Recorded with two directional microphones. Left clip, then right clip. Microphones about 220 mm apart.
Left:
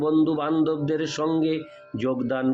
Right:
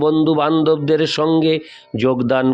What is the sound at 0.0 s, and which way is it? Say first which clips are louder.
A man's voice: right 7 dB; 45° right (ahead or behind).